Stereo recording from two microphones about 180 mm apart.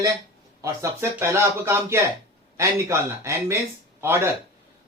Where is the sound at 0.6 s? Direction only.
15° right (ahead or behind).